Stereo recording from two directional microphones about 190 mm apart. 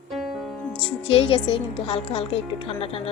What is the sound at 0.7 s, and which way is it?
Speech, 30° left (ahead or behind).